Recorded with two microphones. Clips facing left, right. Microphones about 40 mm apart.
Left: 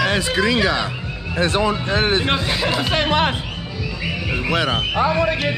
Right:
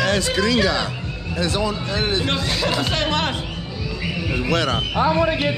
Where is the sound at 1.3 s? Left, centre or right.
Left.